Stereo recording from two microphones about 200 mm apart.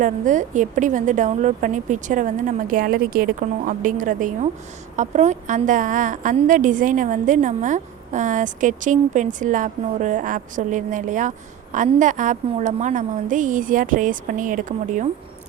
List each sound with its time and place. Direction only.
0.0 s a woman's voice: 40° right (ahead or behind)